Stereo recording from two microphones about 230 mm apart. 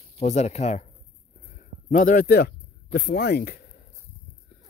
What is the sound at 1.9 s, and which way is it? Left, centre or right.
Speech, left.